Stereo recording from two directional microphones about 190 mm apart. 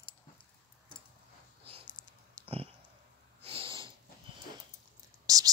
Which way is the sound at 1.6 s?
30° right (ahead or behind).